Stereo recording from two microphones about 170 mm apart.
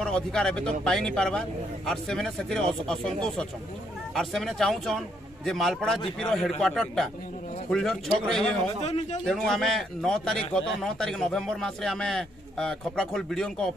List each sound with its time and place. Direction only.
0.0 s a man's voice: 5° left (ahead or behind)
8.8 s a man's voice: 40° left (ahead or behind)
9.2 s a man's voice: centre (ahead or behind)